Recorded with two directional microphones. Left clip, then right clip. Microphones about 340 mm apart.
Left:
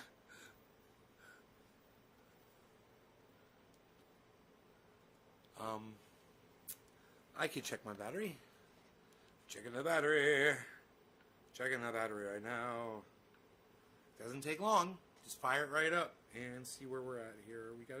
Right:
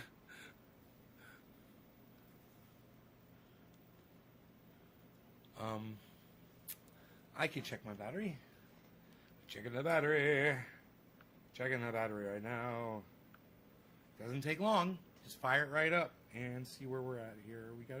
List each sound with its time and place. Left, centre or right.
5.5 s a sound: centre
7.7 s speech: centre
9.5 s speech: centre
14.2 s speech: centre